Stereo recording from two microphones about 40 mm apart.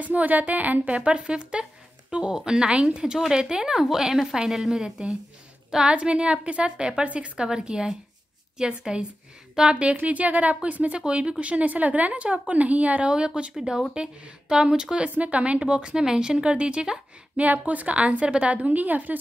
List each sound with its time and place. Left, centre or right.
0.0 s a woman's voice: right
3.0 s a woman's voice: centre
5.9 s a woman's voice: right
10.0 s speech: right
13.0 s a woman's voice: right
13.6 s a woman's voice: centre
15.1 s a woman's voice: right
17.4 s speech: right